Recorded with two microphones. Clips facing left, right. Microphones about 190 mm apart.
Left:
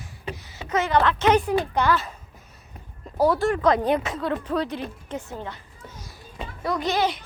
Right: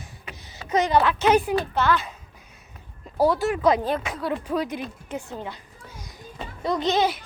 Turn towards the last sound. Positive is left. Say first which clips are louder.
# right 2 dB
turn(degrees=-20)  # may be behind; listen again after turning